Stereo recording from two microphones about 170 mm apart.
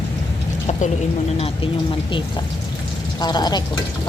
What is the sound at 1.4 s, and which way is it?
Speech, 30° left (ahead or behind).